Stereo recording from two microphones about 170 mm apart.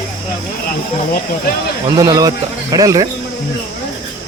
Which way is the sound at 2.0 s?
20° right (ahead or behind).